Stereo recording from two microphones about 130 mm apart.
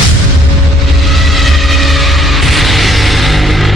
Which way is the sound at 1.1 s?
Centre (ahead or behind).